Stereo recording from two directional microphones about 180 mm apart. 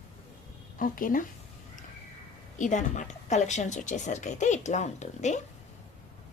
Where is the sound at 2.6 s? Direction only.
40° left (ahead or behind).